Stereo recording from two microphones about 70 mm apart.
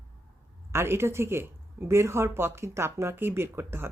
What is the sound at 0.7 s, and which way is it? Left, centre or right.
Speech, right.